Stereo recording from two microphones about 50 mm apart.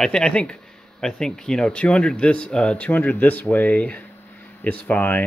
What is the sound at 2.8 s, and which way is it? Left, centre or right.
Speech, left.